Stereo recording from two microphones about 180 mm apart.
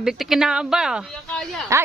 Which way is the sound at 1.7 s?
15° right (ahead or behind).